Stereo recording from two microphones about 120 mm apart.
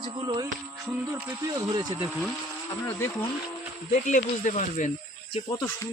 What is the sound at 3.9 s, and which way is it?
Speech, 90° left.